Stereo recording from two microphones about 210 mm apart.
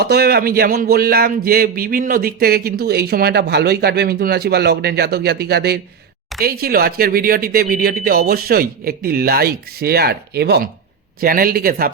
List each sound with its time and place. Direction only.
0.0 s speech: 50° right (ahead or behind)